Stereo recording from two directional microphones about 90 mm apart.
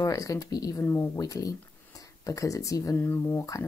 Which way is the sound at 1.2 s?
40° left (ahead or behind).